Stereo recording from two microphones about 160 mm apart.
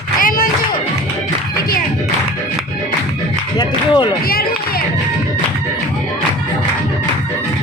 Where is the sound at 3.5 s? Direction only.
30° left (ahead or behind).